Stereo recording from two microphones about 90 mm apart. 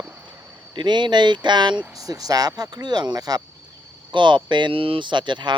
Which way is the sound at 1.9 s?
40° right (ahead or behind).